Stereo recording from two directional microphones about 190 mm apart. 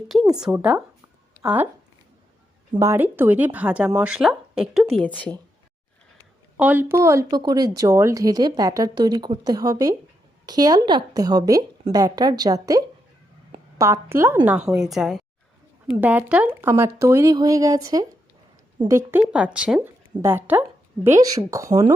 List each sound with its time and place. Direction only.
0.3 s a woman's voice: 5° right (ahead or behind)
2.7 s a woman's voice: 15° right (ahead or behind); by 5.3 s 5° left (ahead or behind)
6.1 s a woman's voice: 10° right (ahead or behind)